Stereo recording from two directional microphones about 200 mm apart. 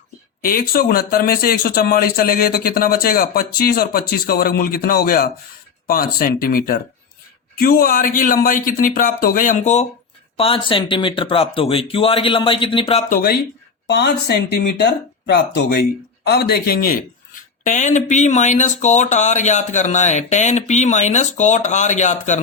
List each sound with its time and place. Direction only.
0.4 s speech: 45° left (ahead or behind); by 13.1 s 30° left (ahead or behind)
13.8 s speech: 55° left (ahead or behind); by 22.4 s 35° left (ahead or behind)